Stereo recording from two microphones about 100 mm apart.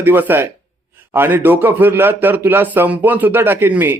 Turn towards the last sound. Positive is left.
turn(degrees=-20)  # may be behind; listen again after turning